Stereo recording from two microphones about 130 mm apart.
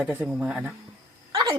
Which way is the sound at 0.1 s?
10° right (ahead or behind).